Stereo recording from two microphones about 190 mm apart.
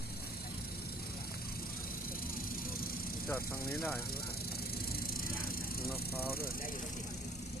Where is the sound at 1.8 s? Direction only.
50° left (ahead or behind).